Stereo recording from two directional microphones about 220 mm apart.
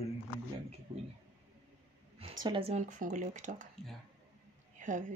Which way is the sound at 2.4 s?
20° right (ahead or behind).